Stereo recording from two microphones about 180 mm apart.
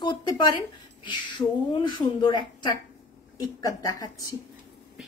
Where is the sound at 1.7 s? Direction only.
25° left (ahead or behind).